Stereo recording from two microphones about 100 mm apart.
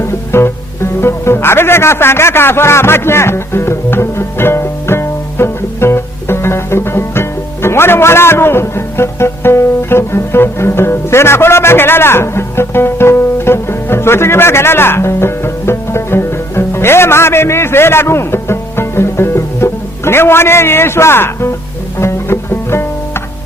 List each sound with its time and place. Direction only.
0.0 s music: 25° left (ahead or behind)